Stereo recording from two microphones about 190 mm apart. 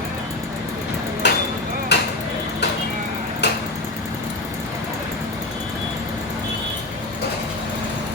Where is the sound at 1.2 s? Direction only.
65° left (ahead or behind).